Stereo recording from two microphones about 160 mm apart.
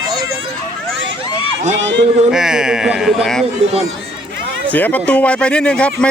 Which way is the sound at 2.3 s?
5° right (ahead or behind).